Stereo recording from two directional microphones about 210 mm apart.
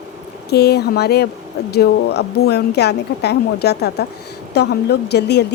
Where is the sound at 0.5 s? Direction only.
50° left (ahead or behind).